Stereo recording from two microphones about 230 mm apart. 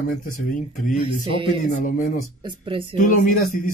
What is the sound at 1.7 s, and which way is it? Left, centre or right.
Speech, left.